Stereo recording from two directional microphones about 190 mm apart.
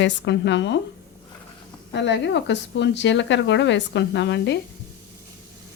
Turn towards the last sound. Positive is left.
turn(degrees=65)  # may be behind; listen again after turning